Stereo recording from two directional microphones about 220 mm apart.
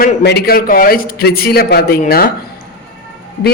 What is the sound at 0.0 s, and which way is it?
A woman's voice, 45° left (ahead or behind).